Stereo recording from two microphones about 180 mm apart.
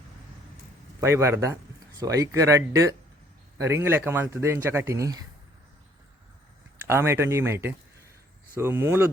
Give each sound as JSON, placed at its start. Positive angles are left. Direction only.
{"t": 1.0, "sound": "speech", "side_deg": -15}
{"t": 6.8, "sound": "speech", "side_deg": -15}